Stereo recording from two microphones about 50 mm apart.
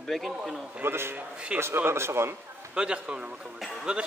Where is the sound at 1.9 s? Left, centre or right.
Right.